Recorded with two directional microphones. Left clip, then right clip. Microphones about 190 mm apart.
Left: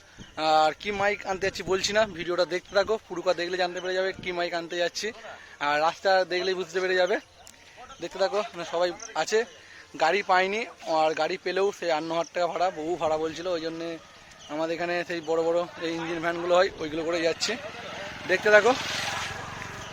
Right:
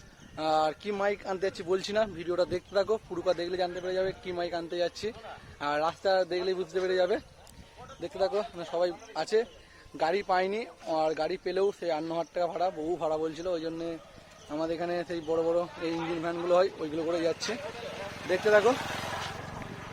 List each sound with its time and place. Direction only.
0.3 s speech: 5° left (ahead or behind)
17.6 s vehicle: 50° right (ahead or behind)
18.4 s speech: centre (ahead or behind)